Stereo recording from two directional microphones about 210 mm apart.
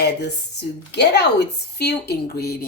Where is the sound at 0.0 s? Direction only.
50° left (ahead or behind).